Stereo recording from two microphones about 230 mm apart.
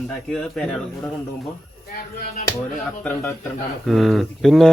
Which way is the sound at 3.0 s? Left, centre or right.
Centre.